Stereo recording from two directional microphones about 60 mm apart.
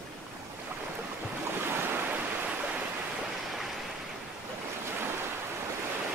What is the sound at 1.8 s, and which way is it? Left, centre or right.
Waves, right.